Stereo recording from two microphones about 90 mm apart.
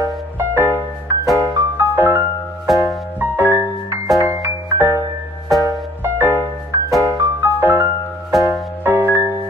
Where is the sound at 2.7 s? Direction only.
Centre (ahead or behind).